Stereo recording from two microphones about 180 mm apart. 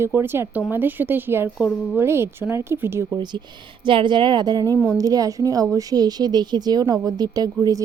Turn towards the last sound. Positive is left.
turn(degrees=-20)  # may be behind; listen again after turning